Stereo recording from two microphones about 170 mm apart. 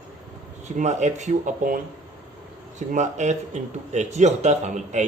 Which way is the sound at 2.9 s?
45° right (ahead or behind).